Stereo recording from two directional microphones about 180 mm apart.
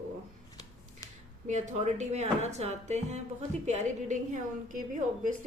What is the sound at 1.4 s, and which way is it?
Speech, 40° right (ahead or behind).